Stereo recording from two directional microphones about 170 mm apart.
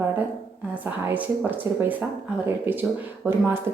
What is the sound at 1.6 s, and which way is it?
Speech, 15° right (ahead or behind).